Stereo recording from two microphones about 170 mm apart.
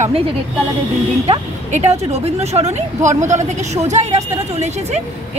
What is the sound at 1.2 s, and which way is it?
Speech, 40° right (ahead or behind).